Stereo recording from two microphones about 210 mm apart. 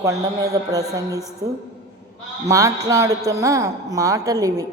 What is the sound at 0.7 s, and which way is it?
Speech, 15° right (ahead or behind).